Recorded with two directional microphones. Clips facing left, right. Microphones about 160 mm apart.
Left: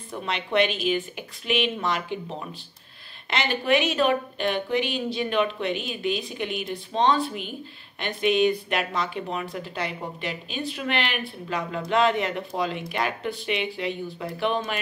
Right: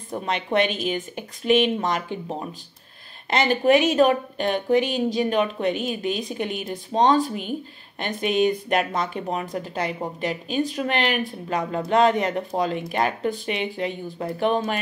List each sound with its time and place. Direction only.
0.1 s speech: 45° right (ahead or behind)
3.3 s speech: 40° right (ahead or behind)